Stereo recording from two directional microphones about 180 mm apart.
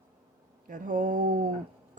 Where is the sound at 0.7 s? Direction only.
50° right (ahead or behind).